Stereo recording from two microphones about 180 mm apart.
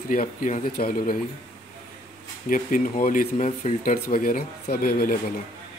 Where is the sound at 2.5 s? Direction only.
50° left (ahead or behind).